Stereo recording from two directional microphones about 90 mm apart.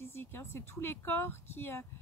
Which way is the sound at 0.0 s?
25° left (ahead or behind).